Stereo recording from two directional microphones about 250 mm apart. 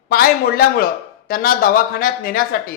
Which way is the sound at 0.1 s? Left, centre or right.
Left.